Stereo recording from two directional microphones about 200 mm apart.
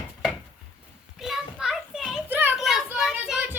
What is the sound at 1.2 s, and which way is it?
Children playing, centre (ahead or behind).